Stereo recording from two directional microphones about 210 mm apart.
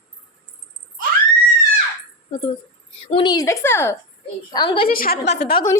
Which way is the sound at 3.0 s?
25° left (ahead or behind).